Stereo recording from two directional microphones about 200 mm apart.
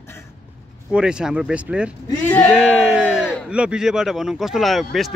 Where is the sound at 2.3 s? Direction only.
10° left (ahead or behind).